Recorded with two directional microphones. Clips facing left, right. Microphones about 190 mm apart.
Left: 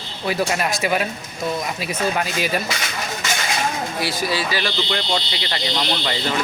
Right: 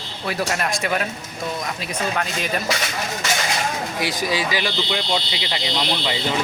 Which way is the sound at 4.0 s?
15° right (ahead or behind).